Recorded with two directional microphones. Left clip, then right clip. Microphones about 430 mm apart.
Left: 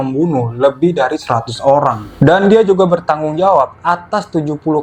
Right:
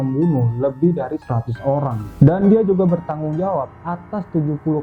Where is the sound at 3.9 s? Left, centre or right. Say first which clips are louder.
Left 13 dB; centre.